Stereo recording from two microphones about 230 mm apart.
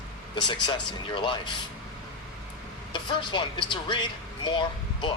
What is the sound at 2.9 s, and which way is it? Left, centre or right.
Speech, left.